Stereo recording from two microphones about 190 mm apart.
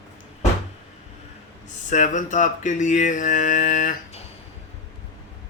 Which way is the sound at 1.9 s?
40° left (ahead or behind).